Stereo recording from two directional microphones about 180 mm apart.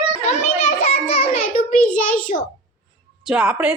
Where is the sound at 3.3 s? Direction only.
5° right (ahead or behind).